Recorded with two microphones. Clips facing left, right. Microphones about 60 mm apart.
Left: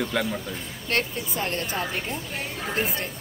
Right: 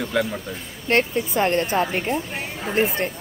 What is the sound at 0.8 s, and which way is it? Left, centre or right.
A woman's voice, right.